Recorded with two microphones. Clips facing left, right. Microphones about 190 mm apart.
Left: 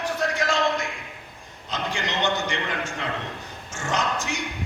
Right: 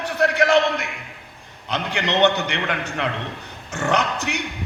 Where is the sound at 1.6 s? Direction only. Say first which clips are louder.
Right 4 dB; 65° right (ahead or behind).